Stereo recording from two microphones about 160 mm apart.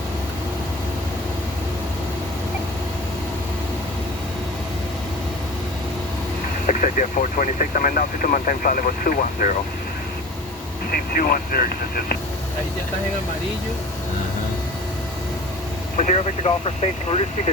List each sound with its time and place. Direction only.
6.7 s speech: 55° left (ahead or behind)
10.9 s speech: 70° left (ahead or behind)
16.0 s speech: 45° left (ahead or behind)